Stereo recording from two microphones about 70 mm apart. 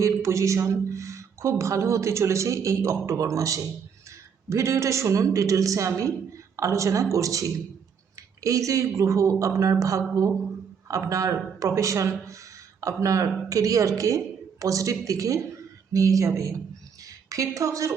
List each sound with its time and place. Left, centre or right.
0.0 s a woman's voice: right
11.1 s speech: right
17.0 s a sound: right